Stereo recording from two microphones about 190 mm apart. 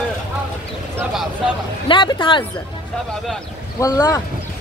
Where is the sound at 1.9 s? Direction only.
25° left (ahead or behind).